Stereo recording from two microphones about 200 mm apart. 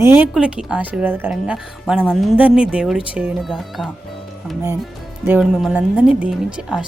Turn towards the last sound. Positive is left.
turn(degrees=-5)  # may be behind; listen again after turning